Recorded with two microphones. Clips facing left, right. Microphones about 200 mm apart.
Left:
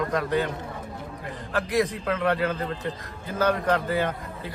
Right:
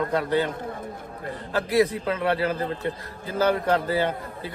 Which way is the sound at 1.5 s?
30° right (ahead or behind).